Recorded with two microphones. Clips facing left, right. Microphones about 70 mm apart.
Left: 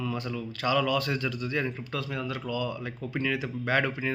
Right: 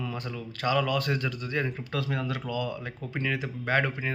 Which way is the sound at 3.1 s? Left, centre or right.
Right.